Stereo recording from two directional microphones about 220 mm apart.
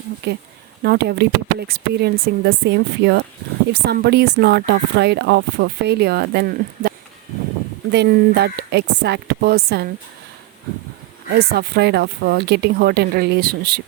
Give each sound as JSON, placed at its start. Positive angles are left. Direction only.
{"t": 0.2, "sound": "speech", "side_deg": -50}
{"t": 11.3, "sound": "speech", "side_deg": -50}